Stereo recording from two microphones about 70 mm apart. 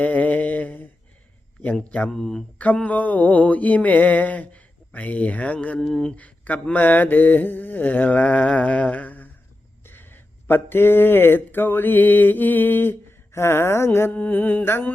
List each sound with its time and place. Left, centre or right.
0.0 s mantra: left
2.0 s speech: centre
2.6 s mantra: left
5.8 s speech: centre
6.1 s mantra: centre
10.4 s mantra: left
14.1 s mantra: left